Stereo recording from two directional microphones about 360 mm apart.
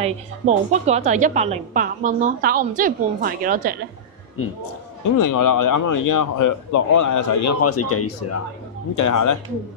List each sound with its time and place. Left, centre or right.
0.0 s a woman's voice: centre
4.4 s a man's voice: left
5.0 s a man's voice: left
8.9 s a man's voice: left